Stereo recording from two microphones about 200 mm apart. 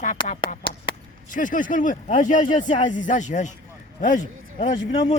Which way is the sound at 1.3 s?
40° left (ahead or behind).